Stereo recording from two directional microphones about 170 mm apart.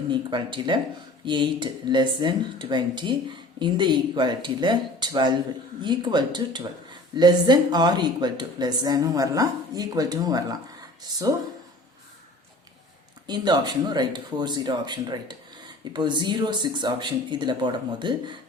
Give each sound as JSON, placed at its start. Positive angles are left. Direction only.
{"t": 0.1, "sound": "speech", "side_deg": -25}
{"t": 13.2, "sound": "speech", "side_deg": -25}